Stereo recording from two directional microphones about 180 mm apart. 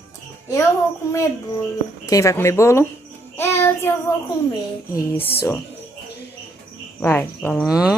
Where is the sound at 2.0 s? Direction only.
15° left (ahead or behind).